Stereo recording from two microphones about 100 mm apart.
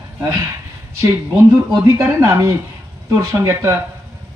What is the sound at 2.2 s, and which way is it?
Speech, 35° right (ahead or behind).